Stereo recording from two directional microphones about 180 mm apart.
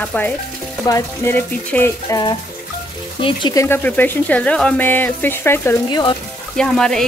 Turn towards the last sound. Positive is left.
turn(degrees=5)  # may be behind; listen again after turning